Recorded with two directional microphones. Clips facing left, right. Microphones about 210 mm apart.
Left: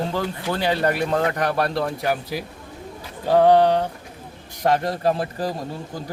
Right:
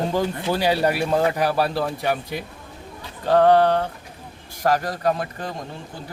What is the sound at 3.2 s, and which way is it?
Speech, 10° left (ahead or behind).